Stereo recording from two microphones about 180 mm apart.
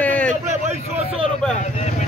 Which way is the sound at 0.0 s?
10° left (ahead or behind).